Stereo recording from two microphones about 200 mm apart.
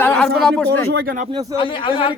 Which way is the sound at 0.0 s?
5° left (ahead or behind).